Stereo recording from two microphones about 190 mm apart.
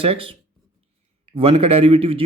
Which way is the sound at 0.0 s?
30° right (ahead or behind).